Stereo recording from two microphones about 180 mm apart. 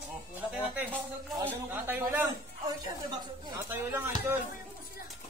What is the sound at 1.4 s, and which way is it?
A man's voice, 10° right (ahead or behind).